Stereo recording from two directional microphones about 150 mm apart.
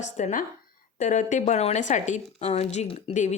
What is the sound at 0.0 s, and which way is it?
A woman's voice, 55° left (ahead or behind).